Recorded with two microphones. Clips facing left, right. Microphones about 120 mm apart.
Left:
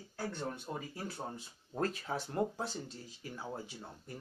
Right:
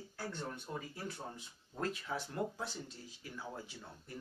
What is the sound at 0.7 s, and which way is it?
Speech, 35° left (ahead or behind).